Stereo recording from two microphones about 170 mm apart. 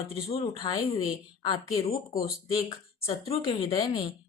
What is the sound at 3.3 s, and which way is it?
Speech, 35° left (ahead or behind).